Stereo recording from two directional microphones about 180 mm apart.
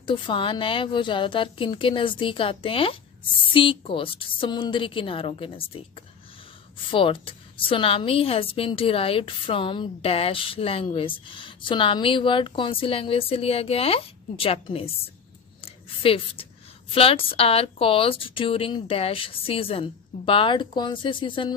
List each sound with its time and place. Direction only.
0.0 s a woman's voice: 25° left (ahead or behind)
6.9 s a woman's voice: 30° left (ahead or behind)
15.6 s a sound: 30° left (ahead or behind)
16.9 s a woman's voice: 30° left (ahead or behind)